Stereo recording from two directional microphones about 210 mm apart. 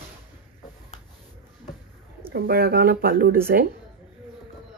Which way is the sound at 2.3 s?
45° right (ahead or behind).